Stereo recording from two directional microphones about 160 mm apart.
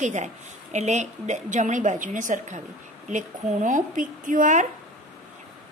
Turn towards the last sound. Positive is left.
turn(degrees=-55)  # may be behind; listen again after turning